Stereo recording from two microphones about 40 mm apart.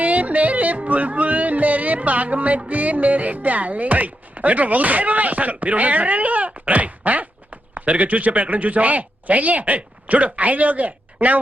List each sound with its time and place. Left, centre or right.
0.0 s yodeling: right
2.6 s chopping: right